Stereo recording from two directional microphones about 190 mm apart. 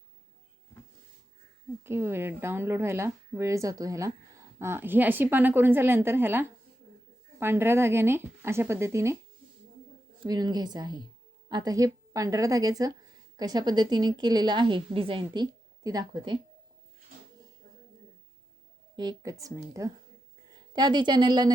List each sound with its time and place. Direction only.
1.8 s speech: 15° right (ahead or behind)
10.2 s a woman's voice: 20° right (ahead or behind)
18.9 s a woman's voice: 20° right (ahead or behind)